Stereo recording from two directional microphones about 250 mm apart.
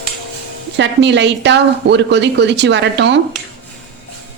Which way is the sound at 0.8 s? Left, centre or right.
Right.